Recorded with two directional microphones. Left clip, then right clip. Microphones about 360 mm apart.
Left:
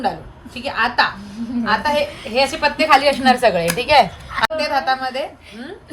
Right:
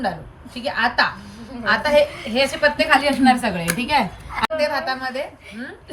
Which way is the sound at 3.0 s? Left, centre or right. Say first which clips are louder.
Left 3 dB; left.